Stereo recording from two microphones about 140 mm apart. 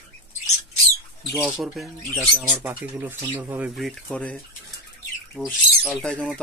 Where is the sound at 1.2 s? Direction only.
5° right (ahead or behind).